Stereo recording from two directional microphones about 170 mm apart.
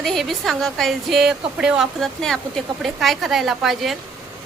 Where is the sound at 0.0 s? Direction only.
Centre (ahead or behind).